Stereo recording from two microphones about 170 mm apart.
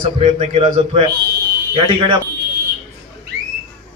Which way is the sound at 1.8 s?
25° right (ahead or behind).